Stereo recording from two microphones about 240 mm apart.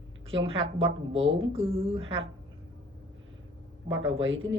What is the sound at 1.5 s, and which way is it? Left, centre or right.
Speech, right.